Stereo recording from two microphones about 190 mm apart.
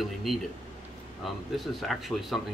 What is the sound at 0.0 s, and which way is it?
Speech, centre (ahead or behind).